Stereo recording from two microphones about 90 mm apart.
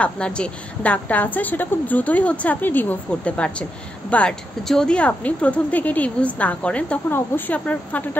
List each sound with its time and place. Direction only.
0.0 s a woman's voice: 10° left (ahead or behind)